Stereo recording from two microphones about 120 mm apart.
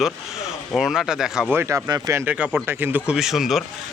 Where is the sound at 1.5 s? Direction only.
20° right (ahead or behind).